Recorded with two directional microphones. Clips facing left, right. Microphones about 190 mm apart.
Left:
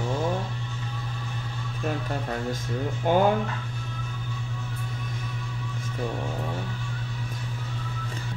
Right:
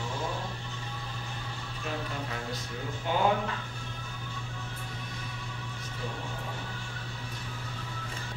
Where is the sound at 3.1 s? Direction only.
50° left (ahead or behind).